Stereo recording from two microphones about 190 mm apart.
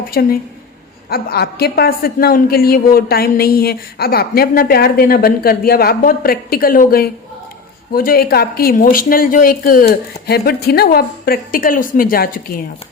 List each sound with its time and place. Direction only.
0.1 s a woman's voice: 50° left (ahead or behind)